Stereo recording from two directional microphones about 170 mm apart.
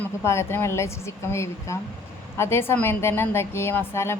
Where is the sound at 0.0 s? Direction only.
15° left (ahead or behind).